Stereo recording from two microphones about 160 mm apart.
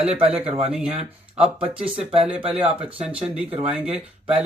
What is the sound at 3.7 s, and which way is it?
Speech, 5° right (ahead or behind).